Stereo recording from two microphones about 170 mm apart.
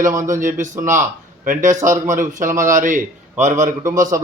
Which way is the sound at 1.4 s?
50° right (ahead or behind).